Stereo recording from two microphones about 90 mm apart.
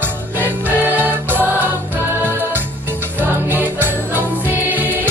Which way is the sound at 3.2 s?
20° right (ahead or behind).